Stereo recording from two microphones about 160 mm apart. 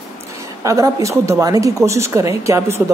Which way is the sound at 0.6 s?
20° right (ahead or behind).